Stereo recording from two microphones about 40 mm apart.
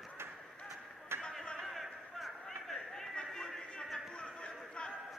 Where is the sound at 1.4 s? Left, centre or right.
Centre.